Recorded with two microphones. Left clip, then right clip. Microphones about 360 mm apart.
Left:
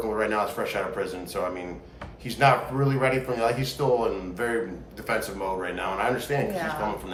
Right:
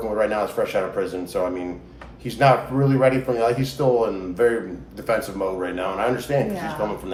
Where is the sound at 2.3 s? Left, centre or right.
Centre.